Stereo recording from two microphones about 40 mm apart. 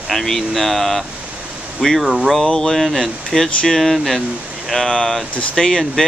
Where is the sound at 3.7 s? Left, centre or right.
Centre.